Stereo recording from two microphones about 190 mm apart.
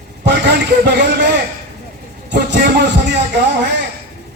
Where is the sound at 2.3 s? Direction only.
65° right (ahead or behind).